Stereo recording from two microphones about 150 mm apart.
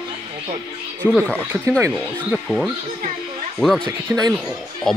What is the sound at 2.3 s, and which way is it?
Speech, centre (ahead or behind).